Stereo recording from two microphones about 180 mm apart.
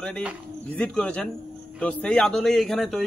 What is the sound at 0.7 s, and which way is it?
A man's voice, 5° left (ahead or behind).